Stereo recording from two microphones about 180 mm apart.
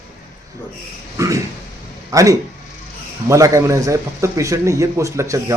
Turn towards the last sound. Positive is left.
turn(degrees=-15)  # may be behind; listen again after turning